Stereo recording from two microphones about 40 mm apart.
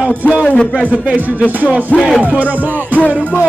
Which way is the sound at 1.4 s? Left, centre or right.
Left.